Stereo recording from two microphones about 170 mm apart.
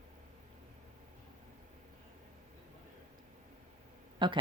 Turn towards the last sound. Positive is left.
turn(degrees=-30)  # may be behind; listen again after turning